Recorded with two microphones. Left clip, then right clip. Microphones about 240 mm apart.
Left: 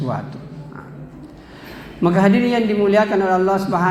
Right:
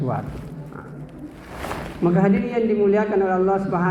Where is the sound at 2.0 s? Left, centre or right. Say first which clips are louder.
Left 4 dB; left.